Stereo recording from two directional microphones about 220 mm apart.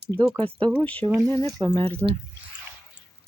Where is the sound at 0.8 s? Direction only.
5° left (ahead or behind).